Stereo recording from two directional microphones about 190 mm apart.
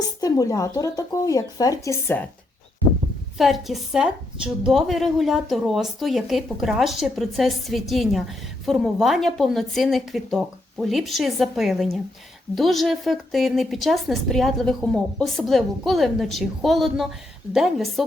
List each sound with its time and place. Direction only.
0.2 s speech: 20° left (ahead or behind)
3.3 s speech: centre (ahead or behind)